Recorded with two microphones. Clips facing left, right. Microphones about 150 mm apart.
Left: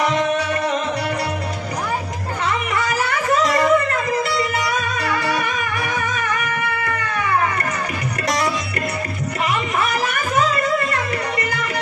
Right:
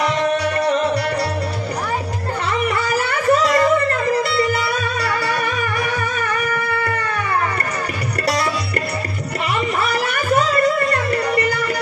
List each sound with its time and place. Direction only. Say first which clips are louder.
2.7 s a sound: right 1 dB; 35° right (ahead or behind)
5.9 s music: right 1 dB; 35° right (ahead or behind)
10.0 s music: right 3 dB; 35° right (ahead or behind)